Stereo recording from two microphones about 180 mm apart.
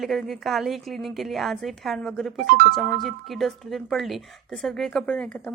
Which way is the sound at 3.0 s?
Centre (ahead or behind).